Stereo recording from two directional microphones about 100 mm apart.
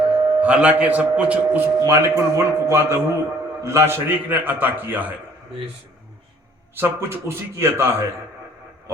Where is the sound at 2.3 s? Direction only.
25° right (ahead or behind).